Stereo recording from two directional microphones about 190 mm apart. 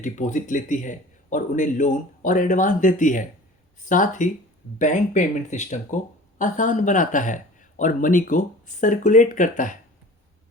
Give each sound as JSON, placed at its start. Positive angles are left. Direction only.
{"t": 0.0, "sound": "speech", "side_deg": 40}